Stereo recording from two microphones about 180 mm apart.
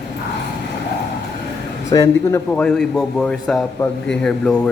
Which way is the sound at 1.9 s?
20° left (ahead or behind).